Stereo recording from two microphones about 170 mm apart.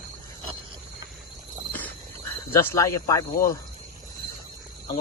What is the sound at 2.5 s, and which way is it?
Speech, 15° left (ahead or behind).